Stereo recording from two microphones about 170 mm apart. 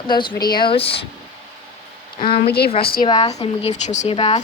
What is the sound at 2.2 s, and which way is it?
Speech, 65° left (ahead or behind).